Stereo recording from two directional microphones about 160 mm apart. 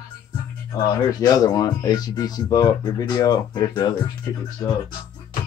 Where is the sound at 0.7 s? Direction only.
25° left (ahead or behind).